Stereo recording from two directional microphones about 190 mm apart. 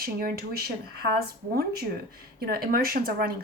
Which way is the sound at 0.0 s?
50° right (ahead or behind).